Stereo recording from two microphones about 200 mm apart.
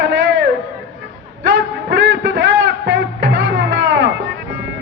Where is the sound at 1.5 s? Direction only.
65° right (ahead or behind).